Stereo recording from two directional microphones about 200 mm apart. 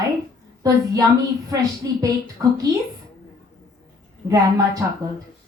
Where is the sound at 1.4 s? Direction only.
15° right (ahead or behind).